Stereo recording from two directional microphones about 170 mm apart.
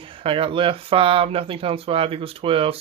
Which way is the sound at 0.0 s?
30° right (ahead or behind).